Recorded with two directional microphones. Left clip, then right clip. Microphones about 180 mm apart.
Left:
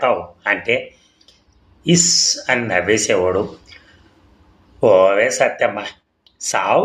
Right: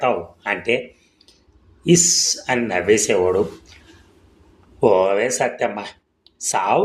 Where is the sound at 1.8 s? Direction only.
25° right (ahead or behind).